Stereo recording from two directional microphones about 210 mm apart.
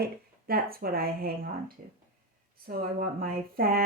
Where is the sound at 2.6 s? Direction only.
45° right (ahead or behind).